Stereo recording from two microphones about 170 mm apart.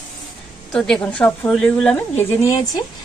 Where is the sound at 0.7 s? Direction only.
5° left (ahead or behind).